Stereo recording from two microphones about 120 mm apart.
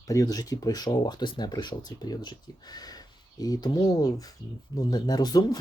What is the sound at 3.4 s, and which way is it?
Speech, 30° left (ahead or behind).